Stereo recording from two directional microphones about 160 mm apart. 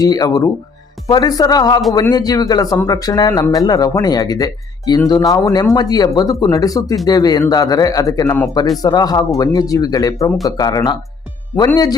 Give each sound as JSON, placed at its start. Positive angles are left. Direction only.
{"t": 0.0, "sound": "speech", "side_deg": 25}